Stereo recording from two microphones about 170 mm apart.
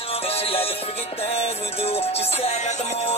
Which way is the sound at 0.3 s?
35° left (ahead or behind).